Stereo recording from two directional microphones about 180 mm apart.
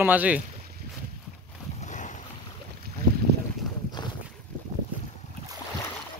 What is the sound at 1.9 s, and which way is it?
Boat, 45° left (ahead or behind).